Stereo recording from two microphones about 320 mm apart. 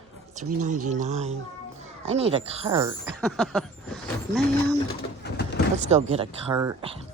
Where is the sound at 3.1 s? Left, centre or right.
Centre.